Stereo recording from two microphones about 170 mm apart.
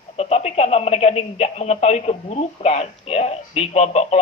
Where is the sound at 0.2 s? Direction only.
40° left (ahead or behind).